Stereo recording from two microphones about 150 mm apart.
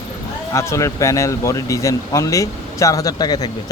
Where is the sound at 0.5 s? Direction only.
20° left (ahead or behind).